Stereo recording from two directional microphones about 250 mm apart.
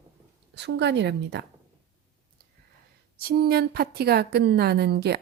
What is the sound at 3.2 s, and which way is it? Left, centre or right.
A woman's voice, right.